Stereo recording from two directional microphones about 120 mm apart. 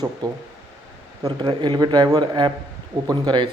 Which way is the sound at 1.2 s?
40° right (ahead or behind).